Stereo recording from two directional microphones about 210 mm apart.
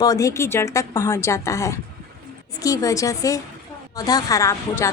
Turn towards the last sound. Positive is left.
turn(degrees=15)  # may be behind; listen again after turning